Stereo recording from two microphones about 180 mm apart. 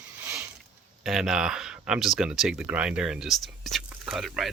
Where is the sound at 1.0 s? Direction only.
5° right (ahead or behind).